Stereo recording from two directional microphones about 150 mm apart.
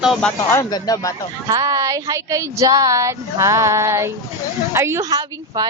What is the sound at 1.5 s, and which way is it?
Speech, 20° right (ahead or behind).